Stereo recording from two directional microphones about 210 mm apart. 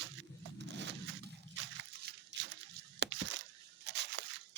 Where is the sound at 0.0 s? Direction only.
55° right (ahead or behind).